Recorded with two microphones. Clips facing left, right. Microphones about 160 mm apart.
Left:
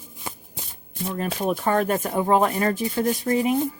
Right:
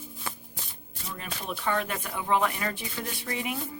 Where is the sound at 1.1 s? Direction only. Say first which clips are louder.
Left 12 dB; 50° left (ahead or behind).